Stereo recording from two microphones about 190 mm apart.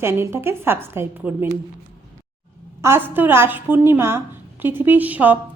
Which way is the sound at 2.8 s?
10° right (ahead or behind).